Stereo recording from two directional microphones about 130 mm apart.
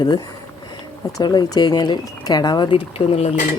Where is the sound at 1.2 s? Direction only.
35° left (ahead or behind); by 3.3 s 50° left (ahead or behind).